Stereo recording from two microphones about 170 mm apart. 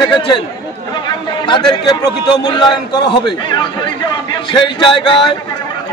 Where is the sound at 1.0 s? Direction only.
25° left (ahead or behind).